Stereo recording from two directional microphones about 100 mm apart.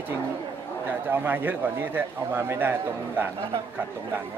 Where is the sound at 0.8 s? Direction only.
20° right (ahead or behind).